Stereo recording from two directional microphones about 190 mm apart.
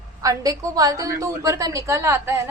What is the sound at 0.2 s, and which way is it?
A woman's voice, 15° right (ahead or behind).